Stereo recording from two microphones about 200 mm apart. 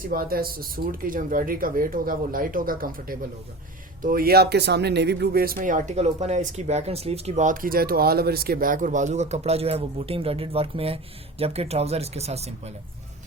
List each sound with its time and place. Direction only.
0.0 s speech: 45° right (ahead or behind); by 12.7 s 30° right (ahead or behind)